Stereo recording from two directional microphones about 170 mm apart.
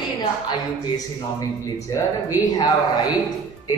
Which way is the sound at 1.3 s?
20° left (ahead or behind).